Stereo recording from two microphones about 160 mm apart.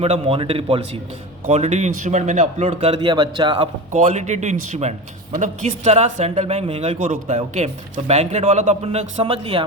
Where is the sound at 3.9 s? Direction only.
45° right (ahead or behind).